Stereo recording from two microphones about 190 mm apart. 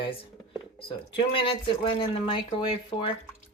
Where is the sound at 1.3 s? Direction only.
25° left (ahead or behind).